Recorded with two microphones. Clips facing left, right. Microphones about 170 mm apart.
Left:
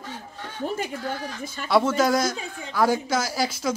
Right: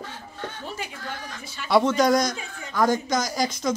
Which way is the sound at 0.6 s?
45° left (ahead or behind).